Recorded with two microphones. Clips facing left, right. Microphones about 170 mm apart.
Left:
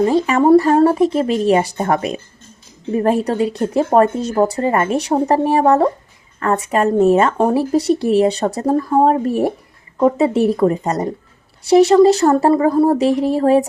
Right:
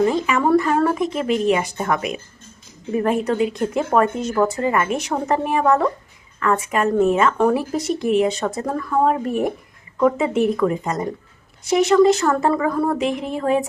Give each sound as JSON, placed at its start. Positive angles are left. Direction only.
{"t": 0.0, "sound": "speech", "side_deg": 35}